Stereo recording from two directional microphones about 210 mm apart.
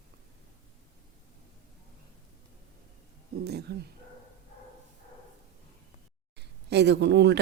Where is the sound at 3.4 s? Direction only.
50° right (ahead or behind).